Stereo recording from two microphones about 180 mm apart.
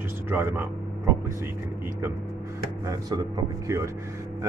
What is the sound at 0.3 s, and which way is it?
Speech, 10° right (ahead or behind).